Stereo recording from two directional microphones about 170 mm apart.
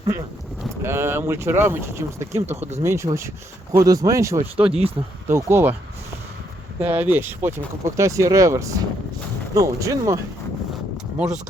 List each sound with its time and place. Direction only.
0.8 s speech: 15° right (ahead or behind)
2.6 s speech: 40° right (ahead or behind)
2.8 s speech: 15° right (ahead or behind)
4.5 s speech: 35° right (ahead or behind)
5.3 s speech: 15° right (ahead or behind)
6.7 s speech: 10° right (ahead or behind)